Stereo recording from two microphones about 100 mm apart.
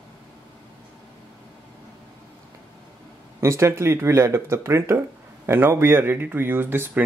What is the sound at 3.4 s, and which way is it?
Speech, 25° right (ahead or behind).